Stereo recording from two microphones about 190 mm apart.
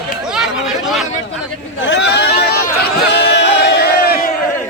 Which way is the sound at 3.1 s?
60° left (ahead or behind).